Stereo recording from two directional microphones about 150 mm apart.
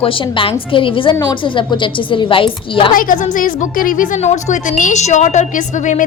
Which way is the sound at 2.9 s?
65° left (ahead or behind).